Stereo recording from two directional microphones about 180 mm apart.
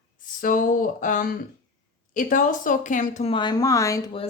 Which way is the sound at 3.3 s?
25° left (ahead or behind).